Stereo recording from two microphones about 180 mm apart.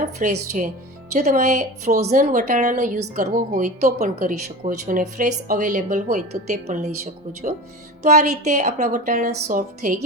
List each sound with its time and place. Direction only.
0.2 s a woman's voice: 45° right (ahead or behind)